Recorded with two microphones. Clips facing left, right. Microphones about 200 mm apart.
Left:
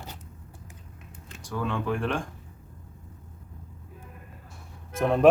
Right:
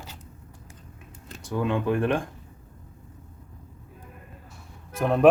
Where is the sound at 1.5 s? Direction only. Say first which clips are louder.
Right 4 dB; 15° right (ahead or behind).